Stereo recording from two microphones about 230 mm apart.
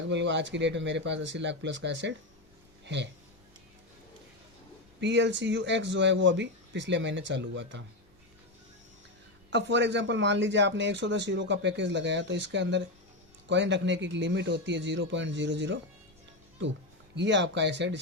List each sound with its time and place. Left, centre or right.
0.1 s a man's voice: right
4.9 s a man's voice: right
9.5 s a man's voice: right
17.2 s a man's voice: right